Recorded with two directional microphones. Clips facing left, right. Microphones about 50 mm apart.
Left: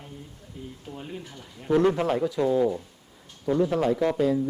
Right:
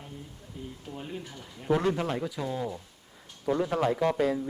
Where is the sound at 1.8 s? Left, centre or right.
Centre.